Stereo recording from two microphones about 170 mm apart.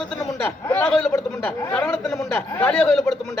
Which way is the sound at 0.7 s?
5° left (ahead or behind).